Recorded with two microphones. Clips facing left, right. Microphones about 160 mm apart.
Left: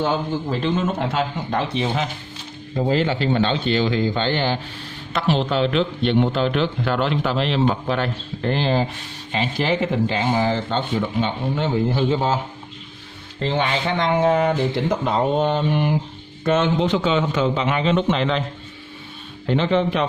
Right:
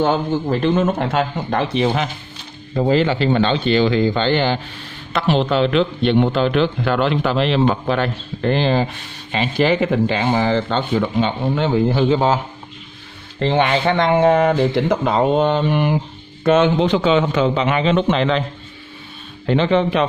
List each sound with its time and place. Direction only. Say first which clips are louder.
0.0 s a man's voice: right 4 dB; 55° right (ahead or behind); by 4.6 s 85° right
5.1 s a man's voice: right 3 dB; 70° right (ahead or behind); by 12.4 s 90° right
13.4 s a man's voice: right 5 dB; 65° right (ahead or behind)
19.4 s speech: right 3 dB; 85° right